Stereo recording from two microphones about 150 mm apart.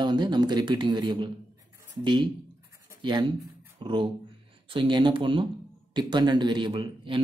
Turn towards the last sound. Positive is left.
turn(degrees=-35)  # may be behind; listen again after turning